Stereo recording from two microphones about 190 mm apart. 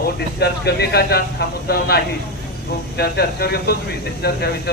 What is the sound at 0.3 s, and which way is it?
Speech, 60° left (ahead or behind).